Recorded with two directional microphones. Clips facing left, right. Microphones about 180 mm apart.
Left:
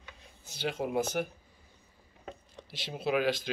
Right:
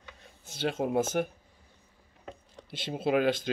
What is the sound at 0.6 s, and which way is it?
Speech, 50° right (ahead or behind).